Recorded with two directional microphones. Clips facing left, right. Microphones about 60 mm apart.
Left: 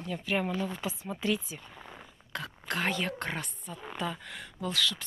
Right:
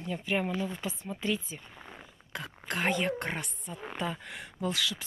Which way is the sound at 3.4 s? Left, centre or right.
Centre.